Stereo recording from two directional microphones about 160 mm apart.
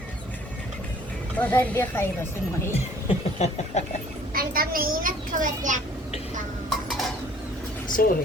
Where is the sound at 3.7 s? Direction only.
45° left (ahead or behind).